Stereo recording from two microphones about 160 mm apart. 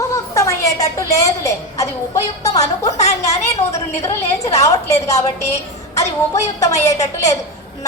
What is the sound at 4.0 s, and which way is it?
A woman's voice, 20° left (ahead or behind).